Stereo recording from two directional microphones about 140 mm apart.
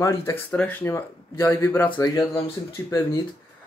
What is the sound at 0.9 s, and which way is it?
Speech, 20° left (ahead or behind).